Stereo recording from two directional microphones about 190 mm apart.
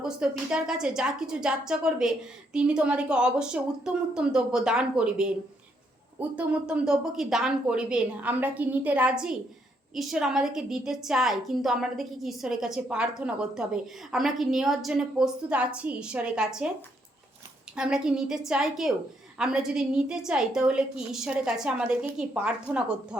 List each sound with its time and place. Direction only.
0.0 s a woman's voice: 5° right (ahead or behind)
17.7 s a woman's voice: 5° right (ahead or behind)